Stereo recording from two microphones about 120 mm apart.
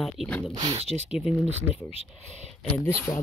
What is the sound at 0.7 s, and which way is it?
Speech, 60° right (ahead or behind).